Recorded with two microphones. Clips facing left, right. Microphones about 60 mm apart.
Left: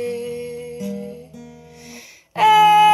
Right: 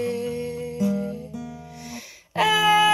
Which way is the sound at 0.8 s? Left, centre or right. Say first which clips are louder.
Right 7 dB; right.